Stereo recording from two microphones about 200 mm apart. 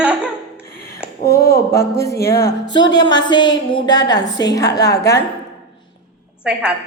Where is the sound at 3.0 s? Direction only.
20° left (ahead or behind).